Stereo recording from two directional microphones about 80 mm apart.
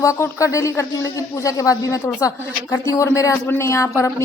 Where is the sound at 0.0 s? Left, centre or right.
Left.